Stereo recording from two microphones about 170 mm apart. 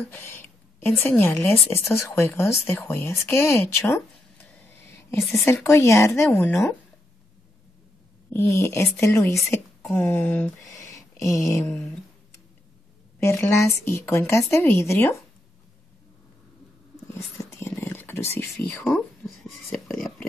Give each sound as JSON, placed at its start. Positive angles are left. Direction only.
{"t": 0.1, "sound": "a sound", "side_deg": 15}
{"t": 1.0, "sound": "speech", "side_deg": 10}
{"t": 5.2, "sound": "a woman's voice", "side_deg": 0}
{"t": 5.5, "sound": "speech", "side_deg": 15}
{"t": 8.3, "sound": "speech", "side_deg": 15}
{"t": 10.0, "sound": "a sound", "side_deg": 10}
{"t": 13.2, "sound": "speech", "side_deg": 15}
{"t": 17.6, "sound": "speech", "side_deg": 15}